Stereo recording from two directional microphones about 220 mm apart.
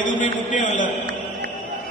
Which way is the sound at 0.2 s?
35° left (ahead or behind).